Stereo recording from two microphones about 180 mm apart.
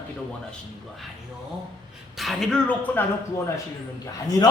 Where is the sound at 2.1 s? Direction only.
Centre (ahead or behind).